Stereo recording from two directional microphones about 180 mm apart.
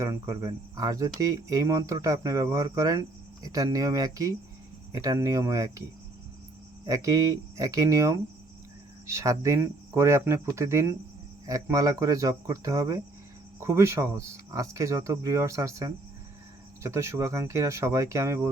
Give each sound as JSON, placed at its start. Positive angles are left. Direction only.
{"t": 0.0, "sound": "speech", "side_deg": -15}
{"t": 6.8, "sound": "speech", "side_deg": -20}